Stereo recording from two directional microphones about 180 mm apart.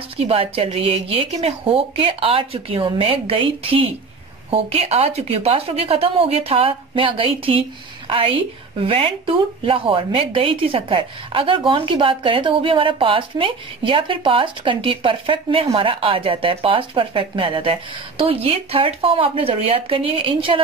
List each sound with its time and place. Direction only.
0.2 s speech: 30° right (ahead or behind)